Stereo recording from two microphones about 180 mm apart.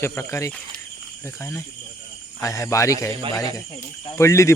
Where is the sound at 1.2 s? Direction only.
15° left (ahead or behind).